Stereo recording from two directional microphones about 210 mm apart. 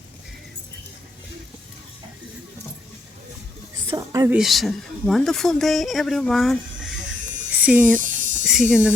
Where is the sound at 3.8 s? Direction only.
20° right (ahead or behind).